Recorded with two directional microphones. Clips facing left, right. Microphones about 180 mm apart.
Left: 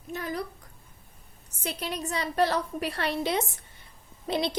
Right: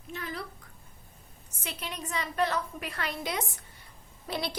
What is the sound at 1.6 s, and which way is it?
A woman's voice, 35° left (ahead or behind).